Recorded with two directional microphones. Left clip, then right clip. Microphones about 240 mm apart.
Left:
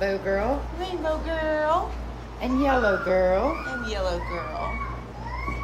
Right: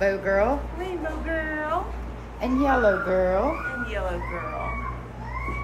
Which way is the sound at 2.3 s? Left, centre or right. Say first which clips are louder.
Right 1 dB; centre.